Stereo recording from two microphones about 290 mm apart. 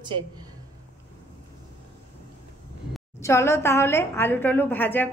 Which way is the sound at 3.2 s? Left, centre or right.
Centre.